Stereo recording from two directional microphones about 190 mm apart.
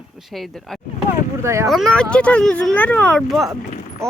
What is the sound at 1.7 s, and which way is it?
Speech, 5° left (ahead or behind).